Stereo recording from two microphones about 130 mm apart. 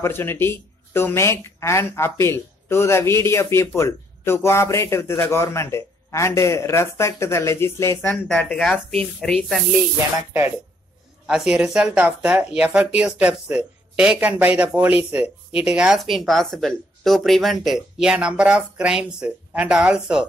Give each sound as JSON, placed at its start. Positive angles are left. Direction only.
{"t": 0.0, "sound": "speech", "side_deg": 15}
{"t": 8.3, "sound": "speech", "side_deg": 10}
{"t": 11.2, "sound": "speech", "side_deg": -5}